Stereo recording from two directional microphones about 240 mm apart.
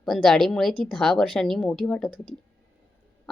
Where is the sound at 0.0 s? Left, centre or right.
Centre.